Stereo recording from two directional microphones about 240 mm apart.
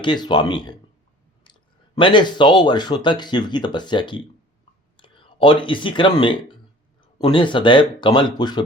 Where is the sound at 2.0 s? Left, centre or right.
Centre.